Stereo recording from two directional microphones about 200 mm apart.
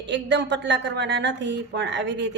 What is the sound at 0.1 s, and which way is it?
Speech, 60° right (ahead or behind).